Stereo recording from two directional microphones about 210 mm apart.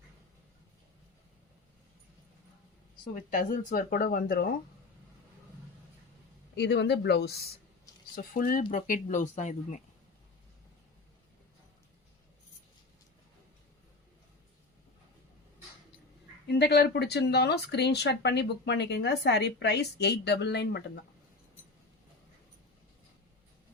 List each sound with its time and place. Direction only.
3.2 s speech: 40° left (ahead or behind)
6.6 s speech: 55° left (ahead or behind); by 9.7 s 35° left (ahead or behind)
16.5 s speech: 50° left (ahead or behind)